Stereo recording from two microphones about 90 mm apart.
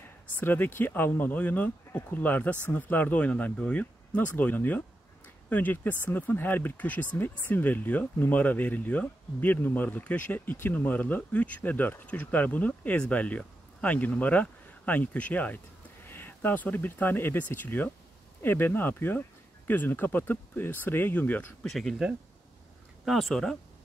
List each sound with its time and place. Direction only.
0.4 s speech: 20° left (ahead or behind)
21.6 s speech: centre (ahead or behind)